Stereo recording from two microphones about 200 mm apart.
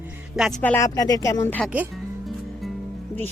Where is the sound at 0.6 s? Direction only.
10° left (ahead or behind).